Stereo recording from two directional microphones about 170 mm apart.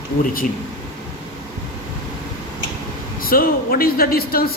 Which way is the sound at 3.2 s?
60° left (ahead or behind).